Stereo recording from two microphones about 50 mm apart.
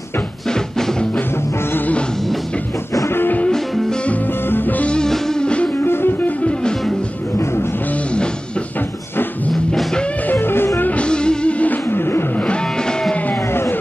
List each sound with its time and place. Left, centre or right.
0.5 s music: centre
3.1 s music: left
3.4 s music: centre
4.5 s music: left
4.8 s music: centre
5.1 s music: centre
5.4 s music: left
5.8 s music: left
10.2 s music: left
11.0 s music: centre
11.9 s music: left
13.5 s music: left